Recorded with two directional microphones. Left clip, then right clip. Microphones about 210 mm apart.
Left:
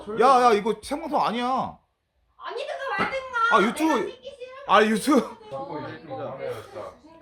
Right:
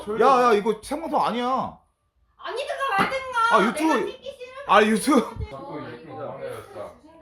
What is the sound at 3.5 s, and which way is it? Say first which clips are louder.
Speech: even; 30° left (ahead or behind).